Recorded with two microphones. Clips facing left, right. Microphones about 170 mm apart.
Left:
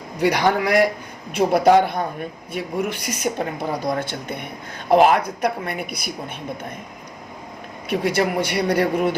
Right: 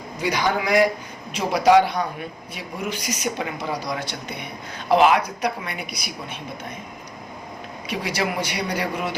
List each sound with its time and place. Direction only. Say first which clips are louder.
0.2 s a man's voice: left 5 dB; 65° left (ahead or behind)
1.3 s a woman's voice: left 2 dB; 55° left (ahead or behind)
7.9 s speech: left 5 dB; 55° left (ahead or behind)